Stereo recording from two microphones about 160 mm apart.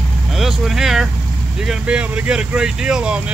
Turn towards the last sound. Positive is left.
turn(degrees=-5)  # may be behind; listen again after turning